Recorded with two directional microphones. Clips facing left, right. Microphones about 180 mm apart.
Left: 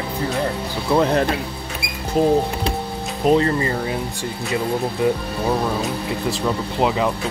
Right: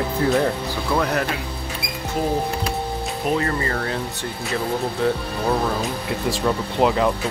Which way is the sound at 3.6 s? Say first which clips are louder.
Left 2 dB; 15° left (ahead or behind).